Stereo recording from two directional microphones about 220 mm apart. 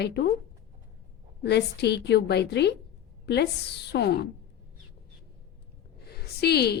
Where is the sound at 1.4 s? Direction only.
50° left (ahead or behind).